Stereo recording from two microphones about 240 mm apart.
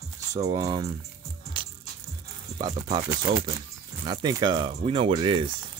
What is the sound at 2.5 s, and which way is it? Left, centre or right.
Speech, centre.